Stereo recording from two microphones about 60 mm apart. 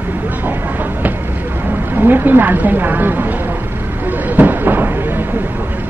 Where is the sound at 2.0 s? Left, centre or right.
Right.